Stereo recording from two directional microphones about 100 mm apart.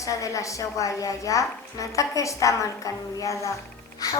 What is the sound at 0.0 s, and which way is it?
A woman's voice, 35° left (ahead or behind).